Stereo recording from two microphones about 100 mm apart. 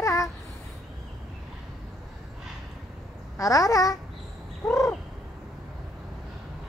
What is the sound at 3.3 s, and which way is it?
Speech, 35° left (ahead or behind).